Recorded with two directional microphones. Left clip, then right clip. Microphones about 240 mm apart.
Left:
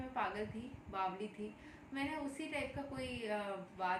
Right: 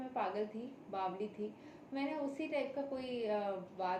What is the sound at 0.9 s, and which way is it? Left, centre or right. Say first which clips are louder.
Speech: even; centre.